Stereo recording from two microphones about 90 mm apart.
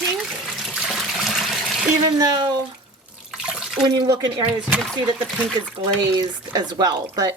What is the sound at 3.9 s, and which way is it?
Speech, 55° right (ahead or behind).